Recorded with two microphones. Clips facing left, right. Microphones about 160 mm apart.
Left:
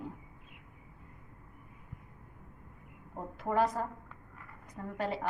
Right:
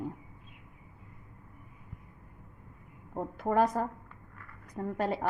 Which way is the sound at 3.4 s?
45° right (ahead or behind).